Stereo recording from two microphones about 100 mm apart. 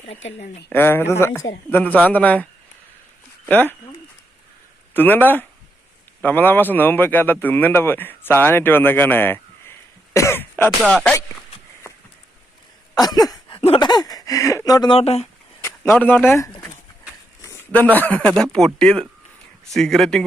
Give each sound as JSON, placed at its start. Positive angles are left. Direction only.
{"t": 0.0, "sound": "speech", "side_deg": 85}
{"t": 0.7, "sound": "a man's voice", "side_deg": 20}
{"t": 4.9, "sound": "a man's voice", "side_deg": 20}
{"t": 12.9, "sound": "a sound", "side_deg": 40}
{"t": 13.7, "sound": "speech", "side_deg": 45}
{"t": 14.8, "sound": "speech", "side_deg": 80}
{"t": 15.6, "sound": "speech", "side_deg": 25}
{"t": 17.4, "sound": "a sound", "side_deg": 30}
{"t": 17.7, "sound": "a man's voice", "side_deg": 15}